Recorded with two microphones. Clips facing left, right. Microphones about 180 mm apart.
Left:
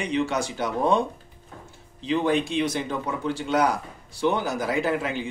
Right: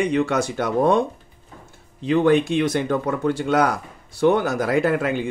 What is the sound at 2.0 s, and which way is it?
Speech, 55° right (ahead or behind).